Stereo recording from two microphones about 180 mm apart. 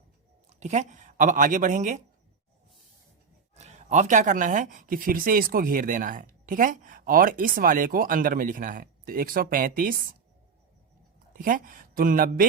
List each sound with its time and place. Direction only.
0.6 s speech: 40° right (ahead or behind)
3.5 s speech: 40° right (ahead or behind)
11.3 s speech: 50° right (ahead or behind)